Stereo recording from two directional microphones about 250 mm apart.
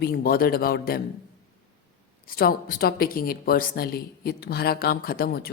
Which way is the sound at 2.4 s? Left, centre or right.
Left.